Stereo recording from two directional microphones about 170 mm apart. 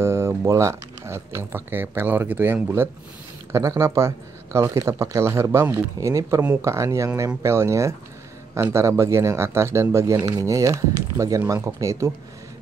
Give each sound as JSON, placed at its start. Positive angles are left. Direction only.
{"t": 0.0, "sound": "speech", "side_deg": -15}